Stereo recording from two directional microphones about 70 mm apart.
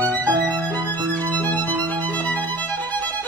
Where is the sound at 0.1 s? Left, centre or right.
Left.